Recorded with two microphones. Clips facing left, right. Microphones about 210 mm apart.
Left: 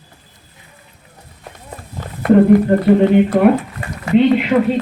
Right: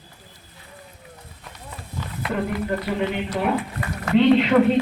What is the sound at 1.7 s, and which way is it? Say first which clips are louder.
Speech: left 2 dB; 50° left (ahead or behind).